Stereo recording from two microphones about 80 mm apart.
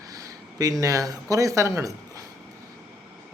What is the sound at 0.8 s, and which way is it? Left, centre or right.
A man's voice, right.